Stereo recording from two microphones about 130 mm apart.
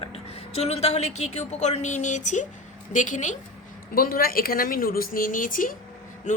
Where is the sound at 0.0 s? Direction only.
50° left (ahead or behind); by 3.3 s 70° left (ahead or behind).